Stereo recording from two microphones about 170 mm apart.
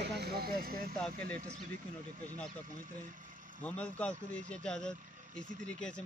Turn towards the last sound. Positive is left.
turn(degrees=5)  # may be behind; listen again after turning